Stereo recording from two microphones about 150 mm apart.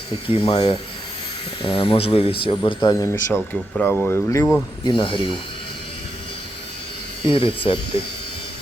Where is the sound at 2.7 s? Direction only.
20° left (ahead or behind).